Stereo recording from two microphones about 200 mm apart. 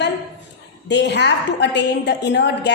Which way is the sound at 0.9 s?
60° left (ahead or behind).